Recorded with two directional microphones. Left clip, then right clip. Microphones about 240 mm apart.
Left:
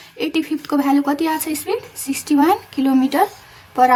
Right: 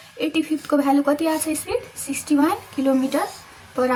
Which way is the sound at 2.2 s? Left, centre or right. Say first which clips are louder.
Left 5 dB; left.